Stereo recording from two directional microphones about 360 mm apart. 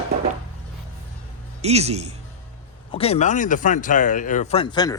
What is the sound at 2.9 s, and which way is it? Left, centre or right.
Speech, centre.